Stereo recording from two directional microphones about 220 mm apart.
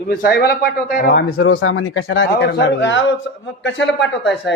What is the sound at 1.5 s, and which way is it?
A man's voice, 65° left (ahead or behind).